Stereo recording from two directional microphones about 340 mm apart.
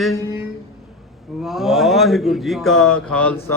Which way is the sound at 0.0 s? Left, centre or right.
Centre.